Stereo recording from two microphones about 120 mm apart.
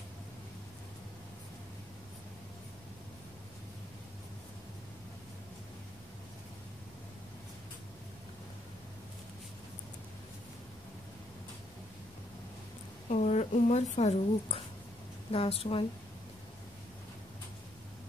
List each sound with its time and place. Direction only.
13.1 s a woman's voice: 75° left (ahead or behind)
15.3 s speech: 55° left (ahead or behind)